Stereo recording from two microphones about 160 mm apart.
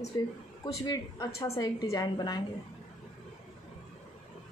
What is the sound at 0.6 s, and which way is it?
A woman's voice, 20° left (ahead or behind).